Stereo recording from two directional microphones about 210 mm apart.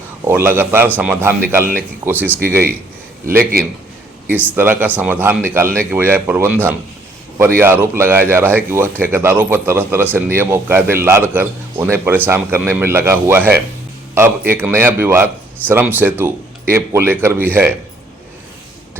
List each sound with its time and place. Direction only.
0.3 s a man's voice: 10° right (ahead or behind)
3.2 s a man's voice: 45° right (ahead or behind)
4.3 s a man's voice: 10° right (ahead or behind)